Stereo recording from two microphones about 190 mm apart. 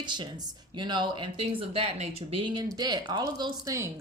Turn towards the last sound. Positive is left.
turn(degrees=-15)  # may be behind; listen again after turning